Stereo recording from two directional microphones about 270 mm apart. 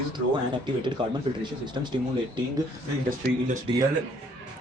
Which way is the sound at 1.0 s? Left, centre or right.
Centre.